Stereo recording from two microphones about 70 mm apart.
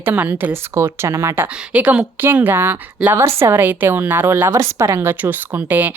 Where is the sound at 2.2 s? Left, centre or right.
Right.